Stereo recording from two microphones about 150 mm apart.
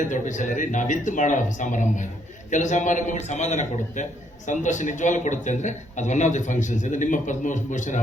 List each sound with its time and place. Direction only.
0.0 s a man's voice: 55° left (ahead or behind)